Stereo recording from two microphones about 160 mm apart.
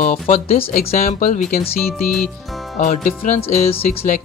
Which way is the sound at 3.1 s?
40° left (ahead or behind).